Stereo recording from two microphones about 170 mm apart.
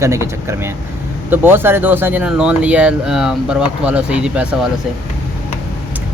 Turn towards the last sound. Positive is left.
turn(degrees=-5)  # may be behind; listen again after turning